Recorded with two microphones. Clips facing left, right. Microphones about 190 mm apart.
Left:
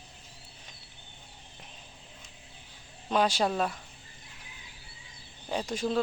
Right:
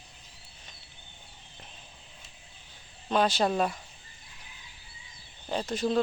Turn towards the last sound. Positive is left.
turn(degrees=5)  # may be behind; listen again after turning